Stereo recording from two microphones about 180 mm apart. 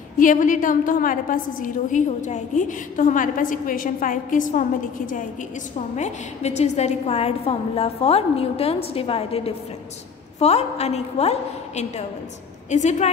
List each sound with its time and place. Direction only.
0.2 s a woman's voice: 45° left (ahead or behind)